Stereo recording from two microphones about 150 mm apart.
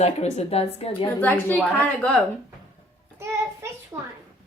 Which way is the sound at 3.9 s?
20° right (ahead or behind).